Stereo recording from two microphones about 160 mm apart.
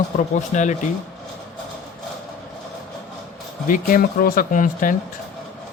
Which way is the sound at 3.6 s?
60° left (ahead or behind).